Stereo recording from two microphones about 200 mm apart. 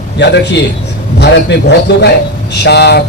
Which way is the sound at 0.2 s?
60° left (ahead or behind).